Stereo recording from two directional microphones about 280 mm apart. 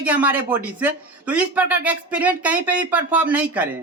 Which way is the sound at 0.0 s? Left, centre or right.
Centre.